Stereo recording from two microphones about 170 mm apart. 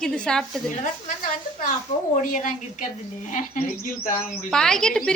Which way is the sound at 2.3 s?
50° left (ahead or behind).